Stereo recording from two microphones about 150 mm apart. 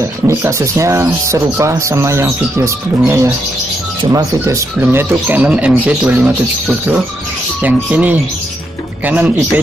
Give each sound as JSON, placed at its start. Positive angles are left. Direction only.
{"t": 0.0, "sound": "speech", "side_deg": -20}
{"t": 7.6, "sound": "speech", "side_deg": -10}